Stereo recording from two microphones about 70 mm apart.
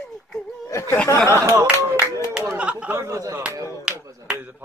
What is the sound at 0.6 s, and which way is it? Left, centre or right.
Speech, left.